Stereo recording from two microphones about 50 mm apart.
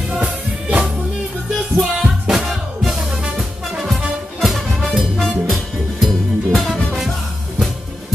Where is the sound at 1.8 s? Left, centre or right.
Centre.